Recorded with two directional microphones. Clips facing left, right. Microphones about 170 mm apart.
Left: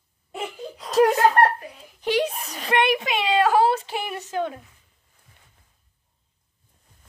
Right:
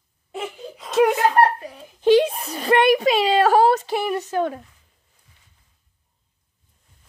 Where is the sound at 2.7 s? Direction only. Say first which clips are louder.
Right 6 dB; 40° right (ahead or behind).